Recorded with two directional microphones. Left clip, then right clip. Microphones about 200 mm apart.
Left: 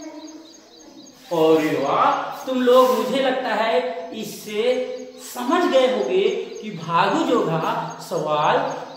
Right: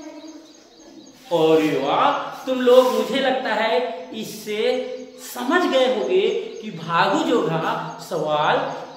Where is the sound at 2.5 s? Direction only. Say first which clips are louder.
Right 1 dB; 25° right (ahead or behind).